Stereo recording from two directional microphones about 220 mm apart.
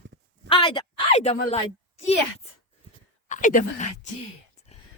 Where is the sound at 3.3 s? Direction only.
35° left (ahead or behind).